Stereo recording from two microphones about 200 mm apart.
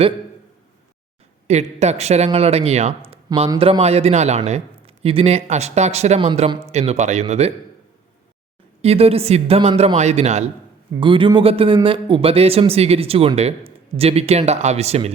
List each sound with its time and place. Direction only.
1.5 s speech: 35° right (ahead or behind)
8.8 s speech: 30° right (ahead or behind)